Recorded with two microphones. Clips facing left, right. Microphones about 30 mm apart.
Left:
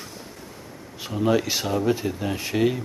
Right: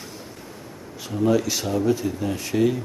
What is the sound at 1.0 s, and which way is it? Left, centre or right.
Speech, left.